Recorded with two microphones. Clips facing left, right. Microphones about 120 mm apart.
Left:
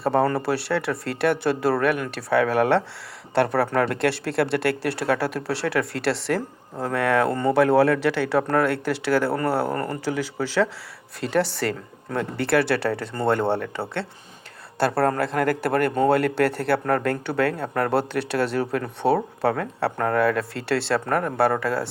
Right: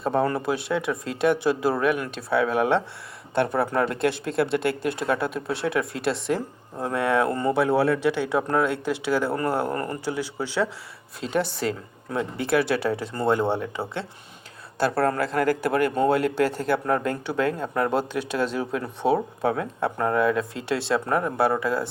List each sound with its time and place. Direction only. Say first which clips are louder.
0.0 s speech: left 2 dB; 70° left (ahead or behind)
9.7 s speech: left 1 dB; 35° left (ahead or behind)
10.4 s speech: left 4 dB; 90° left
11.2 s speech: left 2 dB; 65° left (ahead or behind)
15.0 s speech: right 1 dB; 50° left (ahead or behind)